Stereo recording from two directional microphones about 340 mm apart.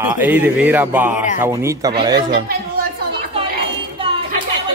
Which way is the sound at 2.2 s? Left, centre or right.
Right.